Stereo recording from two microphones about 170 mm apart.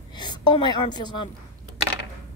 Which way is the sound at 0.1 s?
25° left (ahead or behind).